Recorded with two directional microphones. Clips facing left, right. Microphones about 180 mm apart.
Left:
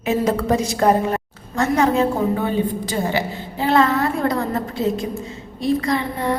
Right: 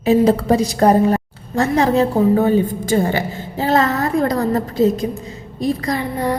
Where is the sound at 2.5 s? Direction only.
45° right (ahead or behind).